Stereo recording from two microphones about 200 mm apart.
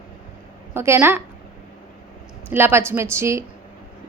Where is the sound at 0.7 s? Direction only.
10° right (ahead or behind).